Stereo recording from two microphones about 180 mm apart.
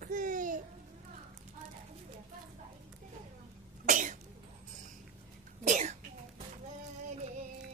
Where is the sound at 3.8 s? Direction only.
45° right (ahead or behind).